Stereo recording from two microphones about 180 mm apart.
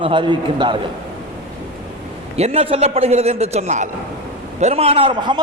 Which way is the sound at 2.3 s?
35° right (ahead or behind).